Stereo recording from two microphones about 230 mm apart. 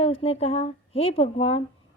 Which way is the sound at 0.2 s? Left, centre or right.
Left.